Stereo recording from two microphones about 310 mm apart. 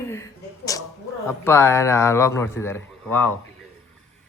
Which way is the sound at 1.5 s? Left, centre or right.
Centre.